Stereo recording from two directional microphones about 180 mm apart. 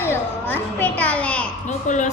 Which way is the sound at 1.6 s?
45° left (ahead or behind).